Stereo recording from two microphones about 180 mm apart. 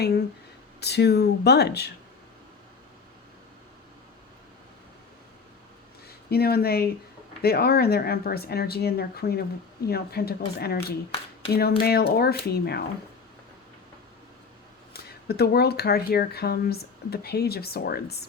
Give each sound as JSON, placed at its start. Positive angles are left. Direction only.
{"t": 0.0, "sound": "speech", "side_deg": 65}
{"t": 6.1, "sound": "speech", "side_deg": 60}
{"t": 15.3, "sound": "speech", "side_deg": 60}